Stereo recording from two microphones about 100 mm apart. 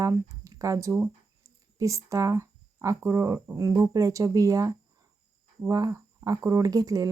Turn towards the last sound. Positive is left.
turn(degrees=-35)  # may be behind; listen again after turning